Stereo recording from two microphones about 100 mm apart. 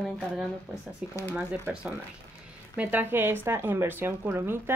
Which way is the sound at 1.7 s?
20° right (ahead or behind).